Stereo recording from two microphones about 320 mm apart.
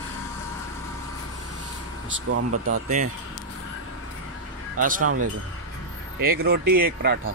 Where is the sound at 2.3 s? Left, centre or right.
Right.